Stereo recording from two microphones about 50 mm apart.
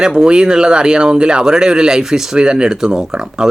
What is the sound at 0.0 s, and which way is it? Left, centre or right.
Speech, centre.